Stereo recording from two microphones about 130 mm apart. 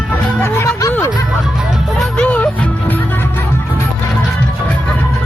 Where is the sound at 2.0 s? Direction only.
10° left (ahead or behind).